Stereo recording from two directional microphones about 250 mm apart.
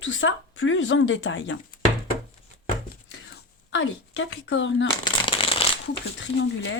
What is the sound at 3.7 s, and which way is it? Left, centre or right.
Speech, left.